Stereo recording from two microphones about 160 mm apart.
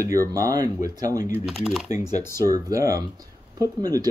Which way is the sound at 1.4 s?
Centre (ahead or behind).